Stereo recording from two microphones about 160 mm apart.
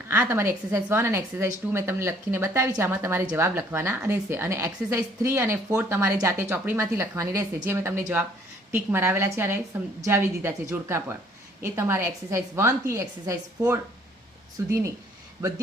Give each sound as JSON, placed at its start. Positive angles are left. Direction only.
{"t": 0.1, "sound": "a woman's voice", "side_deg": -15}